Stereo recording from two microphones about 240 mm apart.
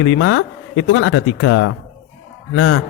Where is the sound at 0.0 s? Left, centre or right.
Left.